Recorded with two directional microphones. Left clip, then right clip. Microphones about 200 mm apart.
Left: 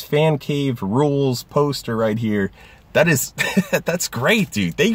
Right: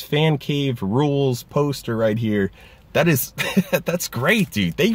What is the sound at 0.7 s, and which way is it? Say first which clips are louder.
Speech: left 3 dB; 15° right (ahead or behind).